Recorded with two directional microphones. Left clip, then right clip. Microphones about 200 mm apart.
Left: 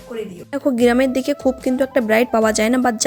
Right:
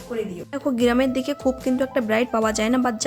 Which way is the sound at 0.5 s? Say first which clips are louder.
Left 5 dB; 25° left (ahead or behind).